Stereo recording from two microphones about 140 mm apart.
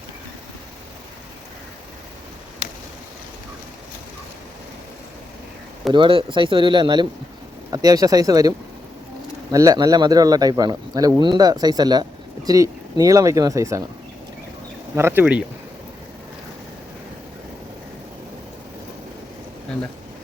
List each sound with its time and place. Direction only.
5.9 s speech: 35° right (ahead or behind)
14.9 s speech: 15° right (ahead or behind)